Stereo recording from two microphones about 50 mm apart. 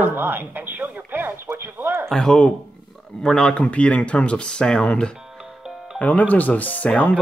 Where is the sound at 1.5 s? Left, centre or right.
Right.